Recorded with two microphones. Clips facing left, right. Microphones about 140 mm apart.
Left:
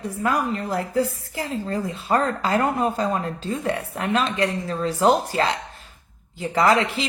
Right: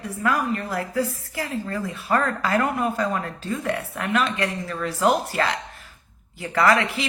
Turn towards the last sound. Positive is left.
turn(degrees=25)  # may be behind; listen again after turning